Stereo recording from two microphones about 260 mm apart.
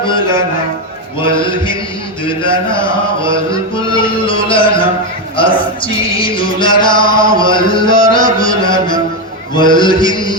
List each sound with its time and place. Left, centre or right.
0.0 s music: centre
9.6 s mantra: centre